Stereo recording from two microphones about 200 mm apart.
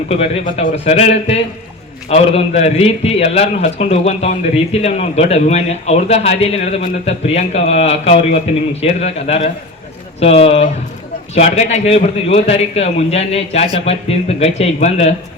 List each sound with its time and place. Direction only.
0.1 s a man's voice: 30° left (ahead or behind)